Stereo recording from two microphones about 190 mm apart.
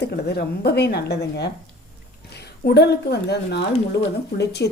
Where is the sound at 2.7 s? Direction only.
60° left (ahead or behind).